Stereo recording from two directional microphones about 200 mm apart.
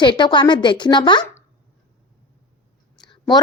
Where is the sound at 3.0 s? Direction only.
20° left (ahead or behind).